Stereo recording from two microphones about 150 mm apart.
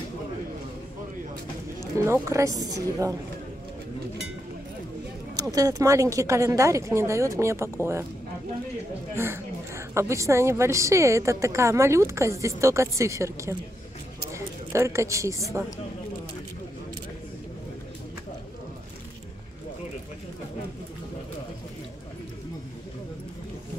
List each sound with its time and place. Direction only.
2.0 s a woman's voice: 20° right (ahead or behind)
5.3 s a woman's voice: 25° right (ahead or behind)
9.1 s a woman's voice: 15° right (ahead or behind)